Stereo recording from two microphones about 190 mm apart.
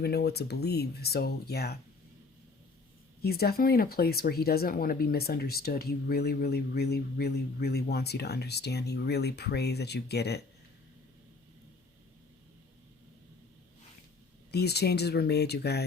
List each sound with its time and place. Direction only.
0.0 s speech: 60° left (ahead or behind)
3.2 s speech: 55° left (ahead or behind)
14.5 s speech: 60° left (ahead or behind)